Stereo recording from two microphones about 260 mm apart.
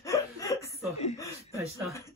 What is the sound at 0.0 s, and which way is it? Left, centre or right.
Chuckle, centre.